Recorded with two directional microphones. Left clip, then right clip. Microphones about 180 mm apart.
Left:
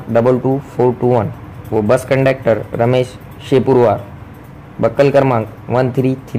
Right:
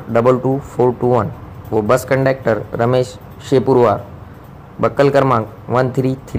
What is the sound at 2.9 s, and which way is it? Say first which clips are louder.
A man's voice: left 1 dB; 10° left (ahead or behind).